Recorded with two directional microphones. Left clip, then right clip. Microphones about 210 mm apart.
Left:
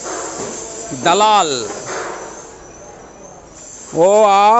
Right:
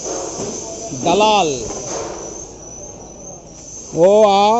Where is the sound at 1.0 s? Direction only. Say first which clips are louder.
Left 2 dB; 50° left (ahead or behind).